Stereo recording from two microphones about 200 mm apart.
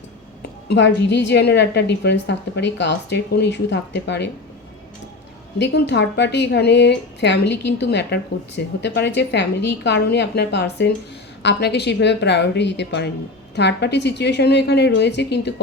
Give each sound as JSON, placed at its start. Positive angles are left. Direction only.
{"t": 0.7, "sound": "a woman's voice", "side_deg": 60}
{"t": 5.5, "sound": "a woman's voice", "side_deg": 60}